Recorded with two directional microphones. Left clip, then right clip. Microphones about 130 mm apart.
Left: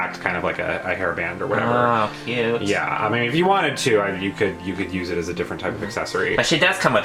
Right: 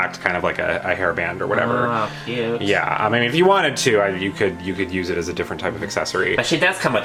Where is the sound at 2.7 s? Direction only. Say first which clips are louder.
Right 3 dB; 35° right (ahead or behind).